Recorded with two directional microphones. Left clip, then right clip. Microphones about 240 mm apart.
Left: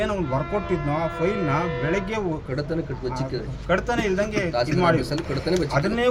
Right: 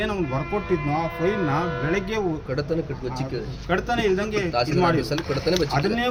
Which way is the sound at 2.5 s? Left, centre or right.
Centre.